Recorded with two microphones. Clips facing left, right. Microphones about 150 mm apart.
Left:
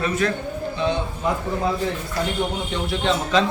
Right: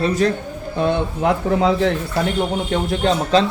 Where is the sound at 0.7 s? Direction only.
55° right (ahead or behind).